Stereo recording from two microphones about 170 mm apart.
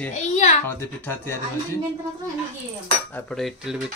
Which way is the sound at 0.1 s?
45° left (ahead or behind).